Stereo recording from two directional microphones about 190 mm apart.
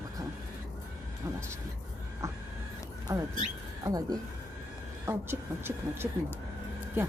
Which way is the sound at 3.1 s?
15° right (ahead or behind).